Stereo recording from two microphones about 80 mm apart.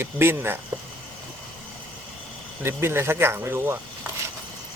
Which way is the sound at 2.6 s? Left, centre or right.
Right.